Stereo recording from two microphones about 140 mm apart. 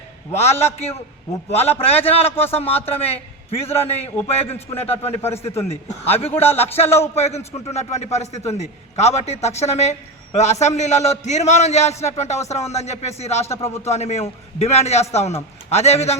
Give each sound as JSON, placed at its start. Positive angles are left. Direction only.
{"t": 1.5, "sound": "a man's voice", "side_deg": 50}
{"t": 2.3, "sound": "speech", "side_deg": 15}
{"t": 2.6, "sound": "a man's voice", "side_deg": 45}